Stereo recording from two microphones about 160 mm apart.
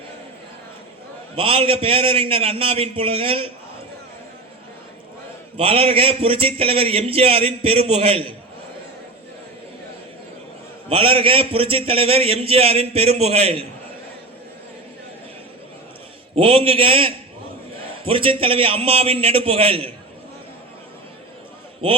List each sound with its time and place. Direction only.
1.4 s a man's voice: 35° right (ahead or behind)
5.5 s a man's voice: 35° right (ahead or behind)
10.8 s a man's voice: 35° right (ahead or behind)
16.3 s a man's voice: 35° right (ahead or behind)